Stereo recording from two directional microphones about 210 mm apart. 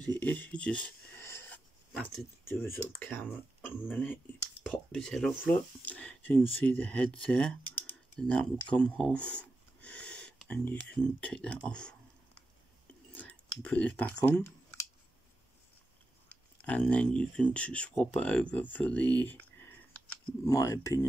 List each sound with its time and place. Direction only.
0.1 s a sound: 10° left (ahead or behind)
2.4 s speech: 10° left (ahead or behind)
13.1 s speech: 5° left (ahead or behind)
16.6 s speech: 5° left (ahead or behind)